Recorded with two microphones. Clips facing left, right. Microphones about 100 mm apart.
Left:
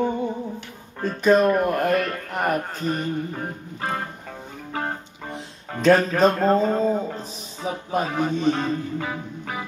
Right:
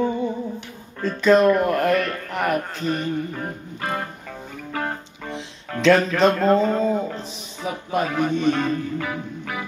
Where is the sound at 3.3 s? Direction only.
35° left (ahead or behind).